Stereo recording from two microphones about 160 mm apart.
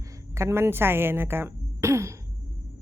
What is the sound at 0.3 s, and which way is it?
A woman's voice, 15° right (ahead or behind).